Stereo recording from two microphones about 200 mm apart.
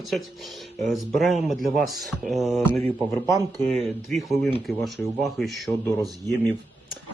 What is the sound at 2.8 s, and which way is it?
Speech, 15° left (ahead or behind).